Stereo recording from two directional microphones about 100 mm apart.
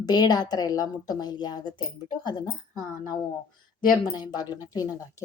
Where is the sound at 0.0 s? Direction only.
45° left (ahead or behind).